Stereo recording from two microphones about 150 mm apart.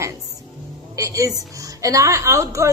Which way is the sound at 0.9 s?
20° right (ahead or behind).